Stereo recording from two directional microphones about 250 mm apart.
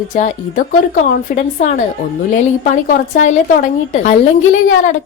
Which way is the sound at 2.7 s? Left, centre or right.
Left.